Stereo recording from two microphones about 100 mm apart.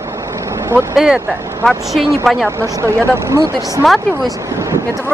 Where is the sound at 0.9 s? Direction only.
5° right (ahead or behind).